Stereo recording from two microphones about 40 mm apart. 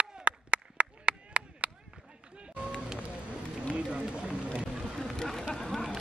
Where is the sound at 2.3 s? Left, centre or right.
Right.